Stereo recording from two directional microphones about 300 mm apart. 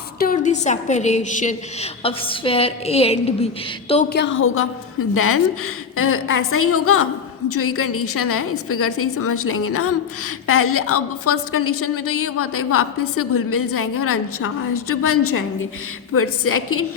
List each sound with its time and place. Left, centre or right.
0.2 s a woman's voice: left
4.1 s a woman's voice: left